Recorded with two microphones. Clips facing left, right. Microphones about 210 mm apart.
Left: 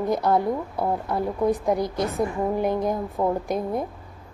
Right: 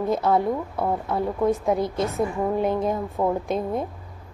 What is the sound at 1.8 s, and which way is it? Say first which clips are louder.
Speech: right 1 dB; 25° right (ahead or behind).